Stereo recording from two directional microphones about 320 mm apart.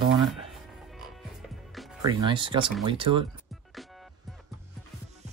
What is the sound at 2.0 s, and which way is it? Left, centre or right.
Speech, centre.